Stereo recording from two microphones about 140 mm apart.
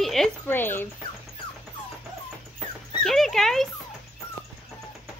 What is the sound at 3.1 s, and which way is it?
Dog, centre (ahead or behind).